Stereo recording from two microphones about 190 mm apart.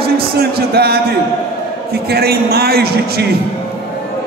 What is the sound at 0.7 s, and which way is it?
A man's voice, 55° right (ahead or behind).